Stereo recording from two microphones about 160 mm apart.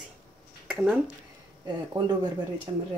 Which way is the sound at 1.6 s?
25° right (ahead or behind).